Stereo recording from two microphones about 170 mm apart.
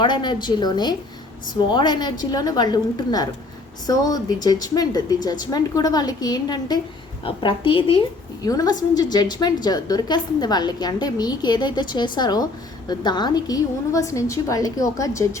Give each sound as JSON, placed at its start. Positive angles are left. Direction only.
{"t": 0.0, "sound": "a woman's voice", "side_deg": 25}